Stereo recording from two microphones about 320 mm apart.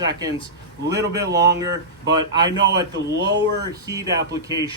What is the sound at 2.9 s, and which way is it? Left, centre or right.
Speech, right.